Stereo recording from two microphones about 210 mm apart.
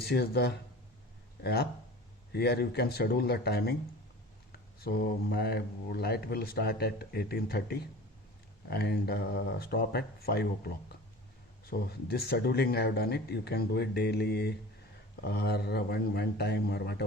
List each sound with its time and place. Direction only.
0.0 s speech: 50° left (ahead or behind)